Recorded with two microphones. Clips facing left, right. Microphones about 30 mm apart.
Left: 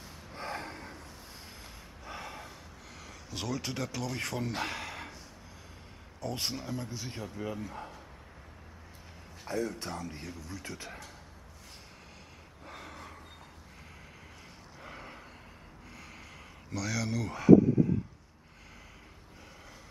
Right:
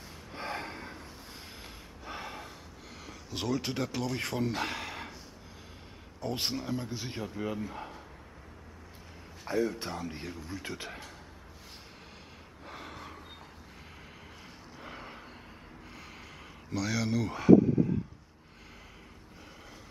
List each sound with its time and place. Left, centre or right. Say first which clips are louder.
0.3 s snort: right 2 dB; centre
2.0 s gasp: right 2 dB; centre
3.1 s speech: right 4 dB; centre
6.2 s a man's voice: right 2 dB; centre
9.5 s speech: right 3 dB; centre
12.6 s gasp: right 2 dB; centre
14.8 s a sound: right 1 dB; centre
16.7 s a man's voice: right 3 dB; centre